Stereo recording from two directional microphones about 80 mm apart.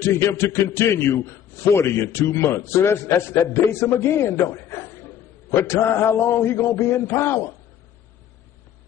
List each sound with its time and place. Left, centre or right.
0.0 s a man's voice: left